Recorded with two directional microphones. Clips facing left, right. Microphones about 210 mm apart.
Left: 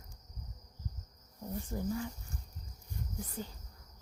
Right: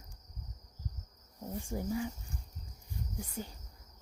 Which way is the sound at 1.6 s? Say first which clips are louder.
Right 1 dB; 15° right (ahead or behind).